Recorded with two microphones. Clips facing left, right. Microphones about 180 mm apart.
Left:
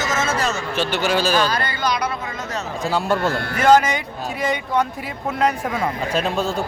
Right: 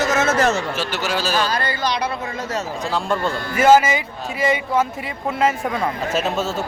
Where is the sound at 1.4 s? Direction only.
30° right (ahead or behind).